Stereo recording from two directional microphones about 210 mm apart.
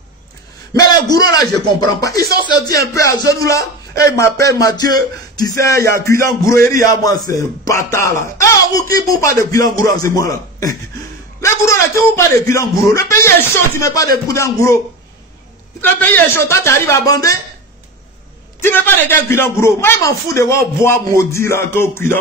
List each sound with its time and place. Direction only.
1.1 s a man's voice: 20° left (ahead or behind)
15.8 s a man's voice: 10° left (ahead or behind)
18.6 s a man's voice: 10° left (ahead or behind)